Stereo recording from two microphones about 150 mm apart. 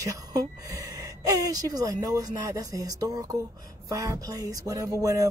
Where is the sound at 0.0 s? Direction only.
25° right (ahead or behind).